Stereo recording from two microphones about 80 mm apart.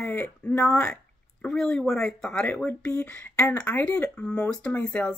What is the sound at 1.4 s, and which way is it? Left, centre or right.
Speech, centre.